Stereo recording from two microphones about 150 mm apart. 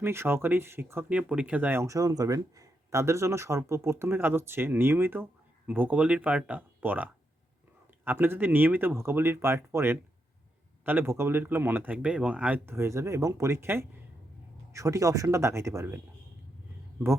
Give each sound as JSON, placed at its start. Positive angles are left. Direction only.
{"t": 0.0, "sound": "speech", "side_deg": -15}